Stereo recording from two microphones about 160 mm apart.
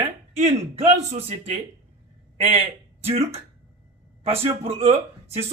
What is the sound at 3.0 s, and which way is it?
A man's voice, 40° right (ahead or behind).